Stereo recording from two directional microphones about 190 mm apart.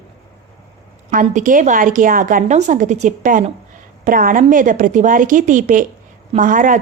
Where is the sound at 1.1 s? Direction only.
45° right (ahead or behind).